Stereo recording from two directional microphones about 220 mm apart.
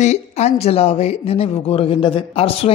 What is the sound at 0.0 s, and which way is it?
A woman's voice, 30° left (ahead or behind).